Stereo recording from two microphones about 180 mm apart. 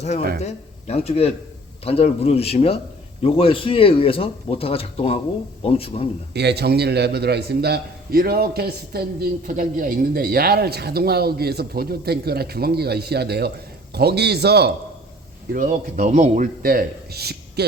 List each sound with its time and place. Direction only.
0.4 s speech: 35° left (ahead or behind)
6.3 s a man's voice: 65° right (ahead or behind)
15.5 s a man's voice: 50° right (ahead or behind)